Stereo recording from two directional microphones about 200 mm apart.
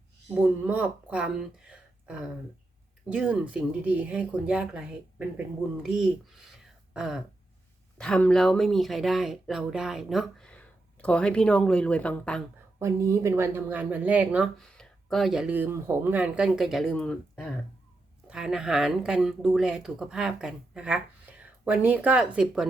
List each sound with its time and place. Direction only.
0.3 s speech: 10° right (ahead or behind)
3.1 s speech: 5° right (ahead or behind)
5.8 s speech: centre (ahead or behind)
12.8 s speech: 15° right (ahead or behind)